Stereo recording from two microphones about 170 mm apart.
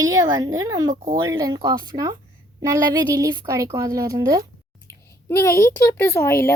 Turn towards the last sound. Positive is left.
turn(degrees=15)  # may be behind; listen again after turning